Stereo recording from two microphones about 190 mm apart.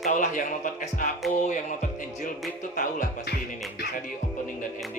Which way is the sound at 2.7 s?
40° left (ahead or behind).